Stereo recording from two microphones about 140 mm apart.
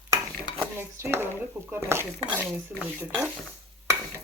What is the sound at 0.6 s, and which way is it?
Dishes, 15° right (ahead or behind).